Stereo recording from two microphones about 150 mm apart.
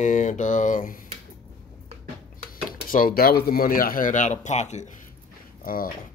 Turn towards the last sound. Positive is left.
turn(degrees=70)  # may be behind; listen again after turning